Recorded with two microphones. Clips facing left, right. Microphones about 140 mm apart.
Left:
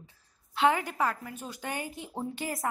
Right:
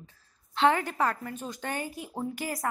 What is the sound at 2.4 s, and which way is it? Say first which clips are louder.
Speech: right 1 dB; 25° left (ahead or behind).